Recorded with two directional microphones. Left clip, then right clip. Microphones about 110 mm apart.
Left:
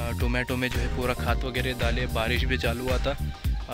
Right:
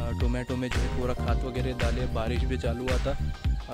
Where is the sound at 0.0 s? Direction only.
Centre (ahead or behind).